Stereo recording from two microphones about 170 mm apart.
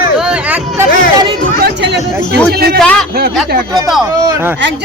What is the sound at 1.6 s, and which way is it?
Speech, 85° right.